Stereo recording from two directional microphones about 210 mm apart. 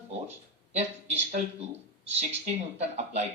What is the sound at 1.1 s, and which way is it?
Speech, 30° right (ahead or behind).